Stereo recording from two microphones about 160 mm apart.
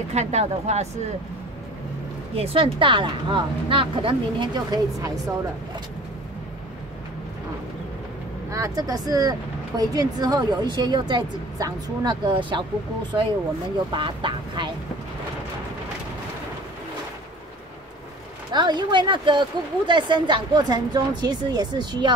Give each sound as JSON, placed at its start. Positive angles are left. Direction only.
{"t": 0.1, "sound": "speech", "side_deg": -45}
{"t": 2.3, "sound": "a woman's voice", "side_deg": -40}
{"t": 8.5, "sound": "speech", "side_deg": -20}
{"t": 13.9, "sound": "a woman's voice", "side_deg": -30}
{"t": 18.5, "sound": "speech", "side_deg": -30}